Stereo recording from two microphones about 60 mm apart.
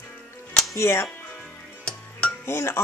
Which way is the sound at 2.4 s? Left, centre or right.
Left.